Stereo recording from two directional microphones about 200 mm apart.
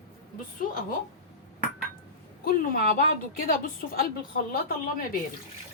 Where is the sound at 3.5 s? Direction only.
45° left (ahead or behind).